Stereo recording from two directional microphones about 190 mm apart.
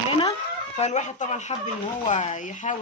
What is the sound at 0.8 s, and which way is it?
Speech, 40° left (ahead or behind).